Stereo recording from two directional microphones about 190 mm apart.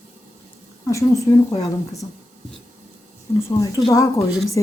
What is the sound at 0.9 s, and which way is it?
A woman's voice, 15° left (ahead or behind).